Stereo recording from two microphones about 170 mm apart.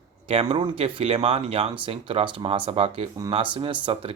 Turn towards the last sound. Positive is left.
turn(degrees=-30)  # may be behind; listen again after turning